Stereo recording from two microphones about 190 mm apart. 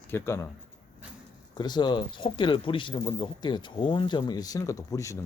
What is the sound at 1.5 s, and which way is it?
Speech, 25° left (ahead or behind).